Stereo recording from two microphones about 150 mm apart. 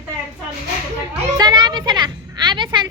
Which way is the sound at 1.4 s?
30° right (ahead or behind).